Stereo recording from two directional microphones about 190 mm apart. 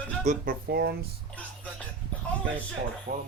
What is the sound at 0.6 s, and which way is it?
Speech, 55° right (ahead or behind).